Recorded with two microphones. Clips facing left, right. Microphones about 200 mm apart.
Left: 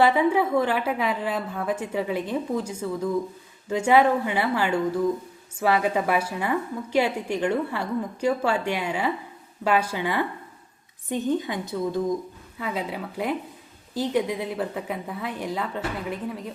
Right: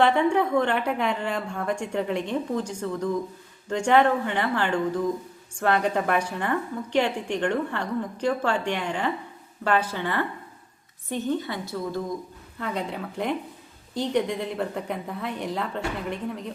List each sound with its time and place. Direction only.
0.0 s a woman's voice: 5° left (ahead or behind)
12.5 s a woman's voice: 5° left (ahead or behind)